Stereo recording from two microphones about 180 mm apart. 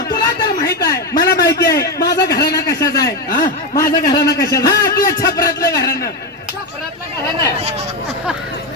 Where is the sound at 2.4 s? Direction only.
20° left (ahead or behind).